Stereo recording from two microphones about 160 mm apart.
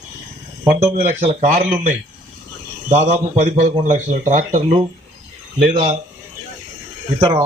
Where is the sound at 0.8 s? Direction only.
40° right (ahead or behind).